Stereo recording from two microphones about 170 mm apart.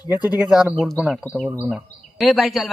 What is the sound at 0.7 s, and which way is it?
Speech, centre (ahead or behind).